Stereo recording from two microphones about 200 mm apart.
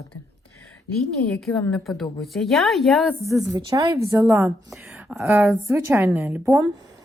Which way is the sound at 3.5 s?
20° right (ahead or behind).